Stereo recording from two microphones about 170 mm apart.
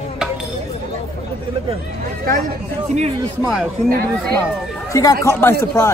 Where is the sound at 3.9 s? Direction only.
65° right (ahead or behind).